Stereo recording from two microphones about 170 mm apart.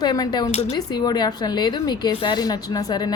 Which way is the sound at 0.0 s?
25° left (ahead or behind).